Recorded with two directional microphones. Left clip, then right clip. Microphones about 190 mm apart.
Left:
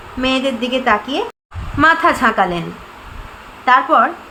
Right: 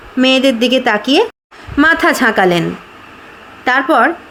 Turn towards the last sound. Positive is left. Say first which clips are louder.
# right 1 dB
turn(degrees=-40)  # may be behind; listen again after turning